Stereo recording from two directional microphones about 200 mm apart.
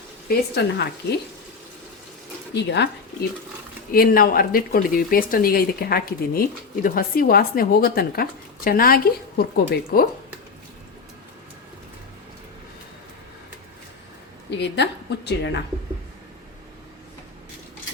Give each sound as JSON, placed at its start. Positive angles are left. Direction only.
{"t": 0.3, "sound": "a woman's voice", "side_deg": 55}
{"t": 2.6, "sound": "speech", "side_deg": 55}
{"t": 3.9, "sound": "speech", "side_deg": 45}
{"t": 14.5, "sound": "a woman's voice", "side_deg": 60}